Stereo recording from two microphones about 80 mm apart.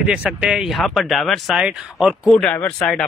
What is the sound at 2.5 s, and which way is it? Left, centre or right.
Speech, centre.